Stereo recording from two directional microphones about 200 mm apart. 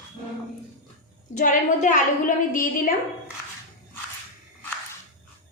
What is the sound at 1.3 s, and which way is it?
A woman's voice, 40° left (ahead or behind).